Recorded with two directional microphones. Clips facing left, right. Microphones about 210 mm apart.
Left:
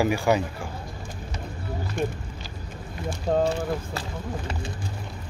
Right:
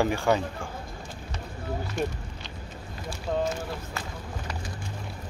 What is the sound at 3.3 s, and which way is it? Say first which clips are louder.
Speech: left 5 dB; 45° left (ahead or behind).